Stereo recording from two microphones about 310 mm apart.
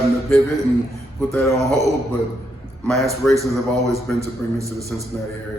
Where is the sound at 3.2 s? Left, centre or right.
Centre.